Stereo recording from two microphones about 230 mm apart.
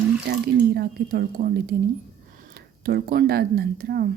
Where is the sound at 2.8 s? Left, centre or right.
Right.